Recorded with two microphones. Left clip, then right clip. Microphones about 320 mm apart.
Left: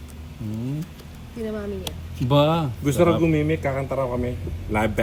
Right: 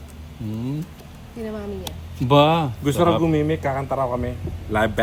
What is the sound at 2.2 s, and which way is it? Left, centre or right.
Speech, centre.